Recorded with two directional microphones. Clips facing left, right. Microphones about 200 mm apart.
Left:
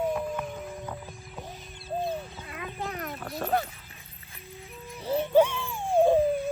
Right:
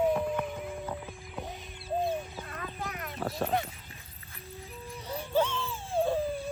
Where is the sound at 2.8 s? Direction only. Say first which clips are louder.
Left 6 dB; 35° left (ahead or behind).